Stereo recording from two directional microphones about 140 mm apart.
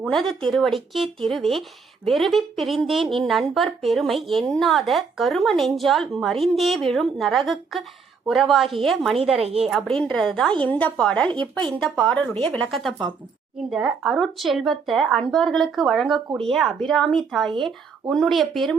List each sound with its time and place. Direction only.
0.0 s a woman's voice: centre (ahead or behind)
9.4 s a woman's voice: 45° right (ahead or behind)
9.6 s a woman's voice: centre (ahead or behind)
13.7 s a woman's voice: 5° right (ahead or behind)